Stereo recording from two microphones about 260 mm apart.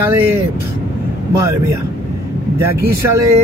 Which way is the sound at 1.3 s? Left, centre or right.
Centre.